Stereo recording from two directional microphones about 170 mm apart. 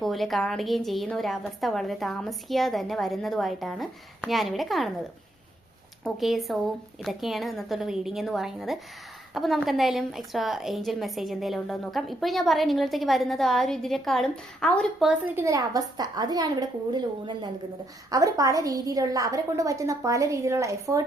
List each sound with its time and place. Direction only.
0.0 s a woman's voice: centre (ahead or behind)
6.1 s a woman's voice: centre (ahead or behind)
15.4 s a woman's voice: 20° right (ahead or behind)